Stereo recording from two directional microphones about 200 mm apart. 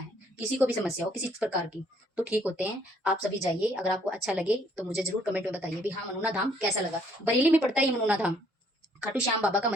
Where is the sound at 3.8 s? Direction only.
5° right (ahead or behind).